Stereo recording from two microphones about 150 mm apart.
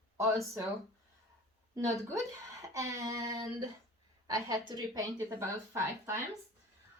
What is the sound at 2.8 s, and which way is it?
A woman's voice, 20° right (ahead or behind).